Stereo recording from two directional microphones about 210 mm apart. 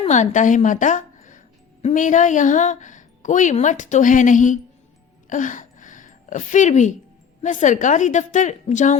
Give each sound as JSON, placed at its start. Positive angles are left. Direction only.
{"t": 0.0, "sound": "a woman's voice", "side_deg": 35}
{"t": 5.3, "sound": "a sound", "side_deg": 35}
{"t": 7.4, "sound": "a woman's voice", "side_deg": 35}